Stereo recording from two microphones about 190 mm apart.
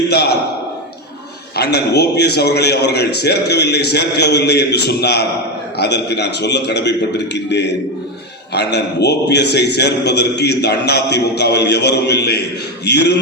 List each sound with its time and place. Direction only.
1.5 s a man's voice: 60° left (ahead or behind)